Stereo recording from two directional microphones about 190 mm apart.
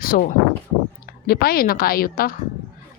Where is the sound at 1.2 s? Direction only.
50° left (ahead or behind).